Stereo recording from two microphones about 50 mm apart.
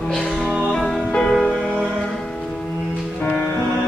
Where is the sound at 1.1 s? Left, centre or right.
Centre.